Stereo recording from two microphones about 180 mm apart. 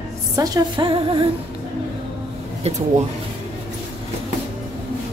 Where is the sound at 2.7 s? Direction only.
35° right (ahead or behind).